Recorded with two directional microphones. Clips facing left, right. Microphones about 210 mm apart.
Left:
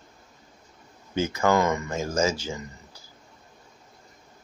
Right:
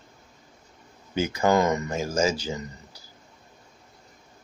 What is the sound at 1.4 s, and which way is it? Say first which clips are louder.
Speech: right 1 dB; 20° right (ahead or behind).